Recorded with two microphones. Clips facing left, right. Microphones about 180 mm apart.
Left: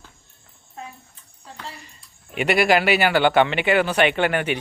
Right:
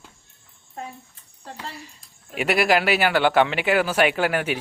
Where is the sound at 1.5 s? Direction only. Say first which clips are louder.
Even; 5° right (ahead or behind).